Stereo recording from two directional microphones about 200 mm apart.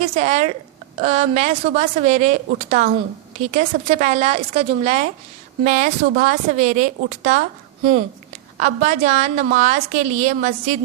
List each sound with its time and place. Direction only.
0.0 s a woman's voice: 35° right (ahead or behind)
8.5 s a woman's voice: 40° right (ahead or behind)